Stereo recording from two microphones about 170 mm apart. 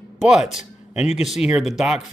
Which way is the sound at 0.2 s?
5° right (ahead or behind).